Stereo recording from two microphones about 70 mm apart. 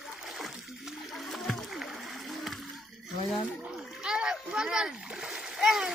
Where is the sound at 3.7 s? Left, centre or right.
Centre.